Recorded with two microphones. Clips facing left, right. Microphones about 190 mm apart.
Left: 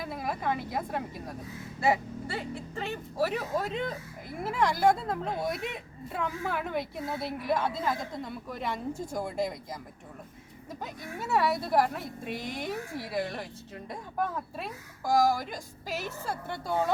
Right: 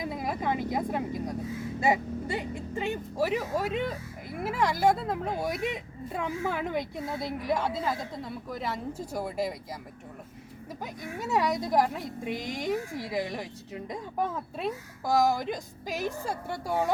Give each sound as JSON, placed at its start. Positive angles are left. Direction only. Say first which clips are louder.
{"t": 0.0, "sound": "a woman's voice", "louder": "right 2 dB", "side_deg": -20}
{"t": 8.2, "sound": "a woman's voice", "louder": "right 1 dB", "side_deg": 0}
{"t": 11.2, "sound": "a woman's voice", "louder": "even", "side_deg": -15}